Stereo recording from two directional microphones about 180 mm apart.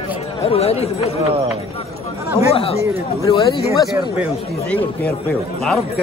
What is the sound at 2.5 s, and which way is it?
Speech, 30° left (ahead or behind).